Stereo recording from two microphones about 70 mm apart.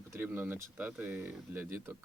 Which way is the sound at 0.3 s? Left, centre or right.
Right.